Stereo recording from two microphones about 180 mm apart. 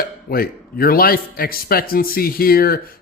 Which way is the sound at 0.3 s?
55° left (ahead or behind).